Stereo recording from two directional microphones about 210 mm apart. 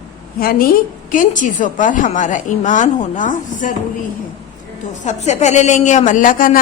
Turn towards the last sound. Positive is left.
turn(degrees=40)  # may be behind; listen again after turning